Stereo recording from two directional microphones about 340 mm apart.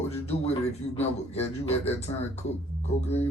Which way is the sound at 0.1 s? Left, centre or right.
Centre.